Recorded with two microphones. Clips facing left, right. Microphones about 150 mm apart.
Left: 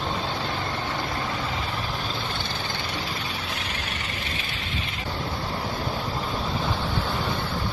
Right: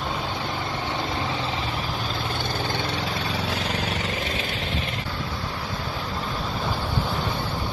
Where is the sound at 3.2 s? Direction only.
85° right.